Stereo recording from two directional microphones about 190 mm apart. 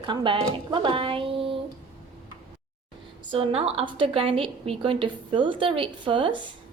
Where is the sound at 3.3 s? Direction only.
30° right (ahead or behind).